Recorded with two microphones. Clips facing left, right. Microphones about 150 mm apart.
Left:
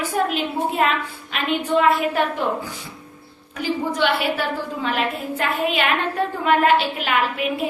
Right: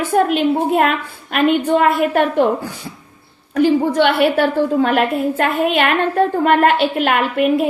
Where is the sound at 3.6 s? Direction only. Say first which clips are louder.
Right 9 dB; 55° right (ahead or behind).